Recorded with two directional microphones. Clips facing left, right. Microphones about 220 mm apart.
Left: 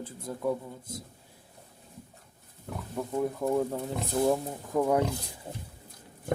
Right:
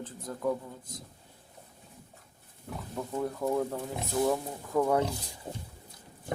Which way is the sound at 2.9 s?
10° left (ahead or behind).